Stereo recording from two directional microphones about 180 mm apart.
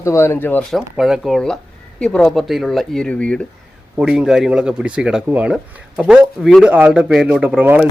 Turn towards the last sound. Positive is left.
turn(degrees=-5)  # may be behind; listen again after turning